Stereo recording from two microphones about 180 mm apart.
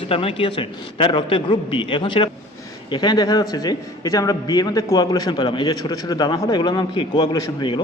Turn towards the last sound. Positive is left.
turn(degrees=25)  # may be behind; listen again after turning